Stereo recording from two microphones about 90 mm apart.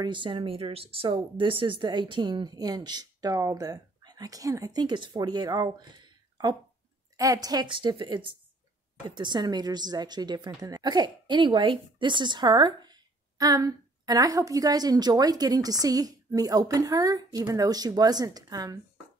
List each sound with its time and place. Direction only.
0.0 s a woman's voice: 65° right (ahead or behind)
7.2 s a woman's voice: 40° right (ahead or behind)
7.6 s speech: 65° right (ahead or behind)
9.0 s a woman's voice: 60° right (ahead or behind)